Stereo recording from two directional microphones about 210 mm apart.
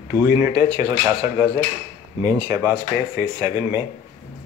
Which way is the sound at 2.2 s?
20° right (ahead or behind).